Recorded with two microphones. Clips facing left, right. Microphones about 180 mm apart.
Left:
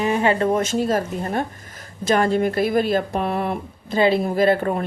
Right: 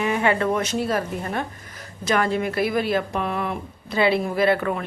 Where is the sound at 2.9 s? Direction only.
35° left (ahead or behind).